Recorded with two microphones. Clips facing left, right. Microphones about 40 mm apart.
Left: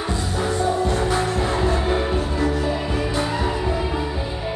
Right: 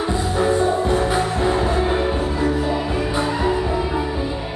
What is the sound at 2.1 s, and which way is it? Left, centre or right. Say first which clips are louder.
Music: right 2 dB; right.